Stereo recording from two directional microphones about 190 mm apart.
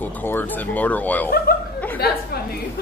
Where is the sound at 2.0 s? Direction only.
55° left (ahead or behind).